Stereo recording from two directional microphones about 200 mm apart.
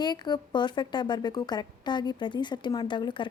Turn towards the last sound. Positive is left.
turn(degrees=25)  # may be behind; listen again after turning